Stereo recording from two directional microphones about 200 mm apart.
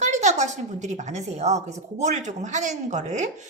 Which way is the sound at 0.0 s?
35° right (ahead or behind).